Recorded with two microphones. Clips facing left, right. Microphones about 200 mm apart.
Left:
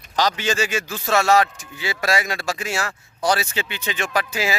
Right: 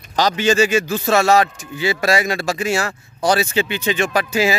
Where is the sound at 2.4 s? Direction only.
25° right (ahead or behind).